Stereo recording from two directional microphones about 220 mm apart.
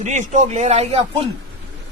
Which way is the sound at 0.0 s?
35° right (ahead or behind).